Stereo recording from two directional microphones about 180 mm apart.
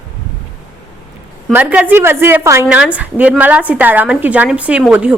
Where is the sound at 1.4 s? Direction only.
5° right (ahead or behind).